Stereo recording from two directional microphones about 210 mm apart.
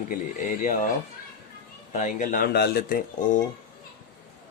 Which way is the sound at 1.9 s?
35° left (ahead or behind).